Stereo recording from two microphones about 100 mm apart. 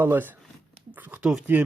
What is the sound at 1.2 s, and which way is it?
Speech, 10° right (ahead or behind).